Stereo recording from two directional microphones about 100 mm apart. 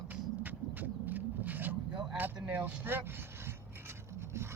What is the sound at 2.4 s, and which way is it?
Rub, 15° right (ahead or behind).